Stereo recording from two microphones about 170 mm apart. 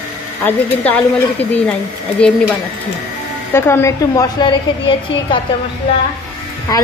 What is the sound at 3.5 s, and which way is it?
A woman's voice, 15° left (ahead or behind).